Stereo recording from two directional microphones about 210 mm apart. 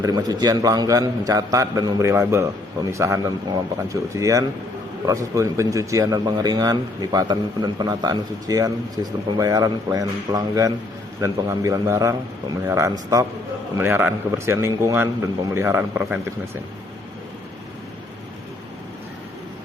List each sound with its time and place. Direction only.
0.0 s speech: 20° right (ahead or behind)